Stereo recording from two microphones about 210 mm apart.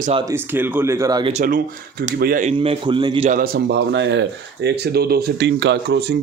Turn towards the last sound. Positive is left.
turn(degrees=-50)  # may be behind; listen again after turning